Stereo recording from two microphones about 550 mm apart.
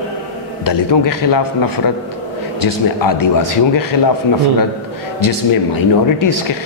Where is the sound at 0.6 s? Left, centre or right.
Left.